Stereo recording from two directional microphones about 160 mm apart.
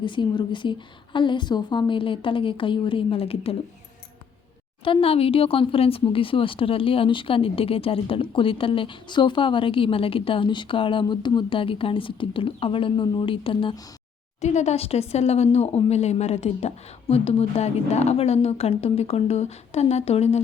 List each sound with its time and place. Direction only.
0.0 s speech: 30° left (ahead or behind)
4.8 s speech: 35° left (ahead or behind)
14.4 s speech: 45° left (ahead or behind)